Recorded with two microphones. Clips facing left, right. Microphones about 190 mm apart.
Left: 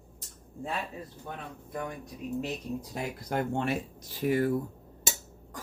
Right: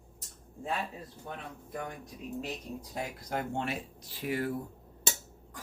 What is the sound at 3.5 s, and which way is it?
Speech, 45° left (ahead or behind).